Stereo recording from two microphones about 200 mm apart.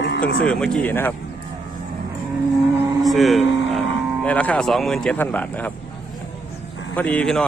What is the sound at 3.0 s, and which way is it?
Vehicle, centre (ahead or behind).